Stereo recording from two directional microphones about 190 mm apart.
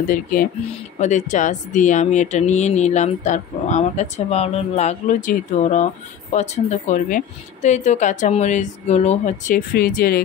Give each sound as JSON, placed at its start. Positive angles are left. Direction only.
{"t": 0.1, "sound": "speech", "side_deg": 45}